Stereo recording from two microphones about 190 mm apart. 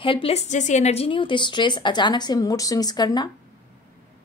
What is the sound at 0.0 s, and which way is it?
Speech, 30° left (ahead or behind).